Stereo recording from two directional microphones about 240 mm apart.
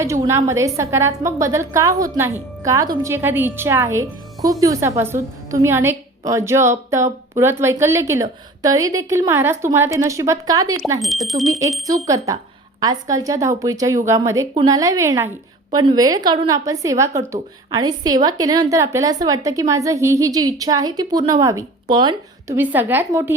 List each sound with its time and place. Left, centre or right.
0.0 s a woman's voice: centre
11.0 s speech: centre
11.9 s a woman's voice: centre